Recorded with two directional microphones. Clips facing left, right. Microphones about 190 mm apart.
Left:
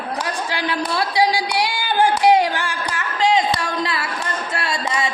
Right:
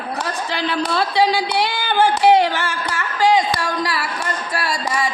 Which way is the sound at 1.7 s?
15° left (ahead or behind).